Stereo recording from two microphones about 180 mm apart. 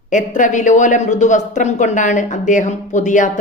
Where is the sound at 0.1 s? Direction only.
45° left (ahead or behind).